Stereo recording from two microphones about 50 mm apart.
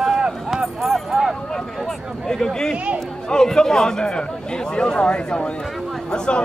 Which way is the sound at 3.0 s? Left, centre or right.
Centre.